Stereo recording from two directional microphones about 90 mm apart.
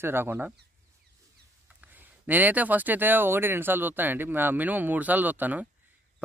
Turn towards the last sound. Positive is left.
turn(degrees=-20)  # may be behind; listen again after turning